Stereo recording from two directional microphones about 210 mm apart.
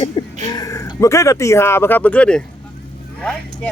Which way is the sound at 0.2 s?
25° left (ahead or behind).